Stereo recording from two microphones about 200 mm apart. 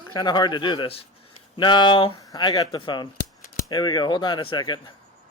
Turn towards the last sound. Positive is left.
turn(degrees=20)  # may be behind; listen again after turning